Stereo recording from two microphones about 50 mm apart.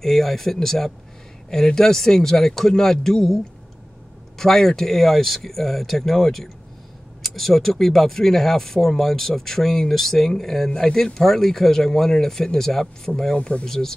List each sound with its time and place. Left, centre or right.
0.0 s speech: centre
4.4 s speech: centre
13.7 s speech: centre